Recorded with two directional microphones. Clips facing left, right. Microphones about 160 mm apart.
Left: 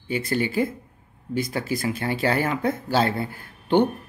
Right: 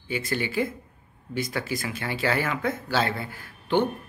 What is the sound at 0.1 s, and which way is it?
A man's voice, 45° left (ahead or behind).